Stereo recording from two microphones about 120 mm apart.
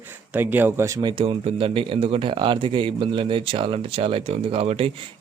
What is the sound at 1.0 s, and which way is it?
Speech, 40° right (ahead or behind).